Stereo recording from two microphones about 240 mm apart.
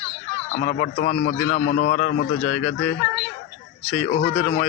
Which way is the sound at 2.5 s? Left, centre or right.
Centre.